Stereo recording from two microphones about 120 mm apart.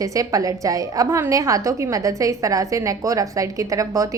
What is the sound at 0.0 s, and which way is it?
A woman's voice, 30° right (ahead or behind).